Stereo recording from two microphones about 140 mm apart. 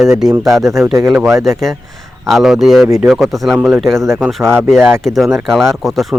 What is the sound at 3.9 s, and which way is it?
Speech, 20° right (ahead or behind).